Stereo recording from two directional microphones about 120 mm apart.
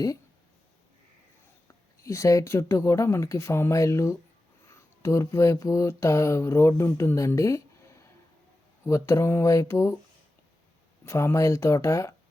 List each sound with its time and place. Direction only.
1.6 s speech: 25° left (ahead or behind)
8.8 s speech: 25° left (ahead or behind)
11.0 s speech: 20° left (ahead or behind)